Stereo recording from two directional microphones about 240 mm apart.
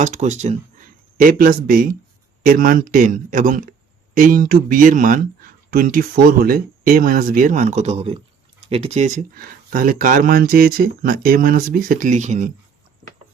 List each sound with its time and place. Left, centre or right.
0.0 s speech: right